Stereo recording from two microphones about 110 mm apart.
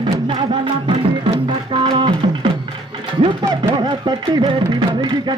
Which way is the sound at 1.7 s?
50° right (ahead or behind).